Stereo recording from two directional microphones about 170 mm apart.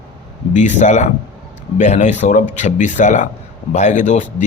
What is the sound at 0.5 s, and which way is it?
A man's voice, 45° left (ahead or behind).